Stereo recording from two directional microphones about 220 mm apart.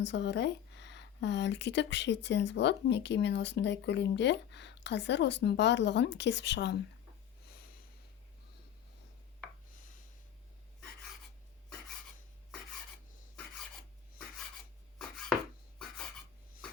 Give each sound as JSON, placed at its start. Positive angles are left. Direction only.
{"t": 0.0, "sound": "speech", "side_deg": 50}